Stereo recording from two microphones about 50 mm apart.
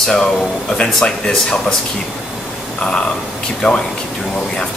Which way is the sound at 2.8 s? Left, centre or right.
Centre.